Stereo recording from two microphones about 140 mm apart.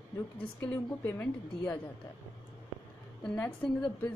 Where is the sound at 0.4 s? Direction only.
15° left (ahead or behind).